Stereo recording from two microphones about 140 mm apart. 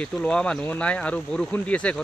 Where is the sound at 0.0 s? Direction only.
10° left (ahead or behind).